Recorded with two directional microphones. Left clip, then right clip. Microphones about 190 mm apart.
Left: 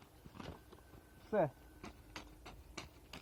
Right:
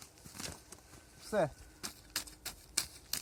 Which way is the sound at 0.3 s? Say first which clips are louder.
Right 6 dB; 35° right (ahead or behind).